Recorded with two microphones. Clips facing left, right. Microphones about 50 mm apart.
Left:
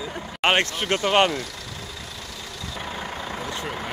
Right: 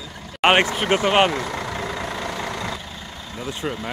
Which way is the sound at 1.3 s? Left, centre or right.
Right.